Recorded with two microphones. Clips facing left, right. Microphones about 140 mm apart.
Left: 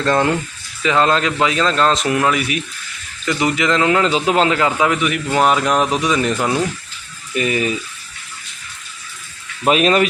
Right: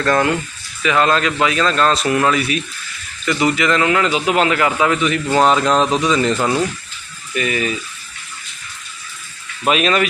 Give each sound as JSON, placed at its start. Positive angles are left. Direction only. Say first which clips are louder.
{"t": 0.0, "sound": "a man's voice", "louder": "even", "side_deg": 25}
{"t": 7.3, "sound": "a man's voice", "louder": "left 2 dB", "side_deg": 30}
{"t": 9.6, "sound": "speech", "louder": "left 2 dB", "side_deg": 35}